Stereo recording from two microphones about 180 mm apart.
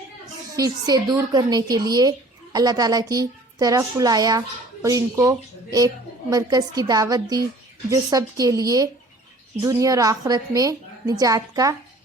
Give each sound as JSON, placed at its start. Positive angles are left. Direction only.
{"t": 0.5, "sound": "a woman's voice", "side_deg": -20}